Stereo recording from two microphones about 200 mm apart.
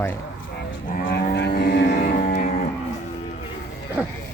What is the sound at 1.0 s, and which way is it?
Livestock, 45° left (ahead or behind).